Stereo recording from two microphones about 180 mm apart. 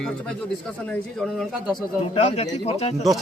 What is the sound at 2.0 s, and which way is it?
A man's voice, 35° left (ahead or behind).